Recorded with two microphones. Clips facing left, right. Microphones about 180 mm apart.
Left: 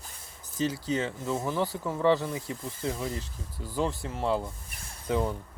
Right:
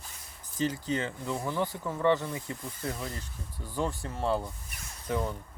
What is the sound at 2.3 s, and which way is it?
Speech, 20° left (ahead or behind).